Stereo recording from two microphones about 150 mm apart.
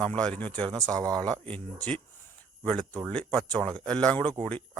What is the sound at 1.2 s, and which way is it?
Speech, 10° left (ahead or behind).